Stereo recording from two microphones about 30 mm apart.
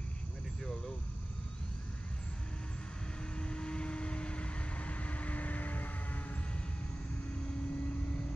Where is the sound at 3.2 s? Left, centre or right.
Left.